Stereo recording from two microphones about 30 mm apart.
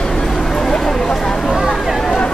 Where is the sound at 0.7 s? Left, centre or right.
Left.